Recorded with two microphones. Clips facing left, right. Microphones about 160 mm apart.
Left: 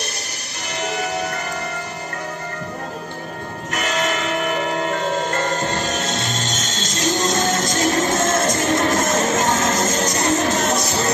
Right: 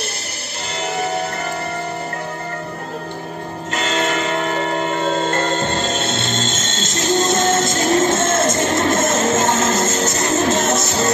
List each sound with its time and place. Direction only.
3.7 s bell: 30° right (ahead or behind)
5.0 s music: 25° right (ahead or behind)